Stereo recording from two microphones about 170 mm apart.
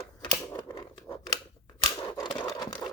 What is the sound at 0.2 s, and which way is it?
Scissors, 25° left (ahead or behind).